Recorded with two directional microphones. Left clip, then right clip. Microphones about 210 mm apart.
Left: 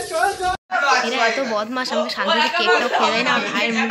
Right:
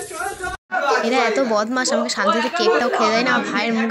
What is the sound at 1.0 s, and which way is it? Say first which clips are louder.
Speech: right 2 dB; 30° right (ahead or behind).